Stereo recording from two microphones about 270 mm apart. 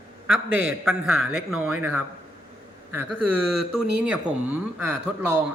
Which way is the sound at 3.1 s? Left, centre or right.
Right.